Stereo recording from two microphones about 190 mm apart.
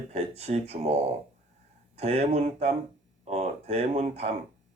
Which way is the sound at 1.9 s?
35° right (ahead or behind).